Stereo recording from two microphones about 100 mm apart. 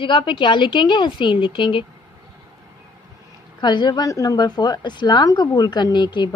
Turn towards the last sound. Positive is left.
turn(degrees=50)  # may be behind; listen again after turning